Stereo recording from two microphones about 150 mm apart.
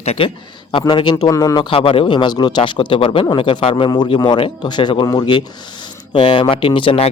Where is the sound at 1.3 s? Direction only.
20° left (ahead or behind).